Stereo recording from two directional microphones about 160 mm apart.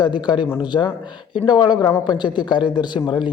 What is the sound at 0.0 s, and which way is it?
A man's voice, 30° left (ahead or behind).